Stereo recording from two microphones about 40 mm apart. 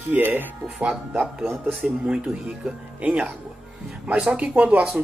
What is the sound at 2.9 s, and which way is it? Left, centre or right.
Speech, right.